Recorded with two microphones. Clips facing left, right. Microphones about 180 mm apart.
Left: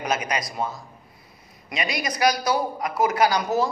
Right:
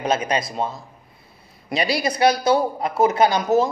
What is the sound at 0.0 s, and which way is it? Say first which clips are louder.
A man's voice: right 5 dB; 30° right (ahead or behind).